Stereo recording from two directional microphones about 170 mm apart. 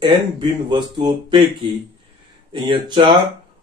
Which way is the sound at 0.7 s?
25° right (ahead or behind).